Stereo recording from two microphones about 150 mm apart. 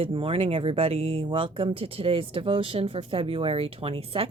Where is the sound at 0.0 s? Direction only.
35° right (ahead or behind).